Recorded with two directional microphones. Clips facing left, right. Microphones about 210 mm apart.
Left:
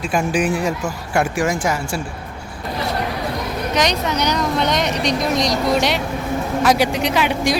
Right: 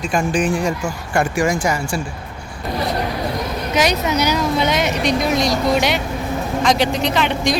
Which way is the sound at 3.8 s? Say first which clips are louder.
Right 3 dB; 5° right (ahead or behind).